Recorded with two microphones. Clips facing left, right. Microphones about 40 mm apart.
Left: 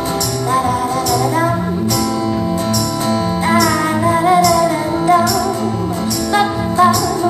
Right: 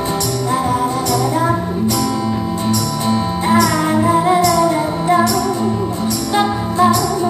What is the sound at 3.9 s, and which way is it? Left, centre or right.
Music, centre.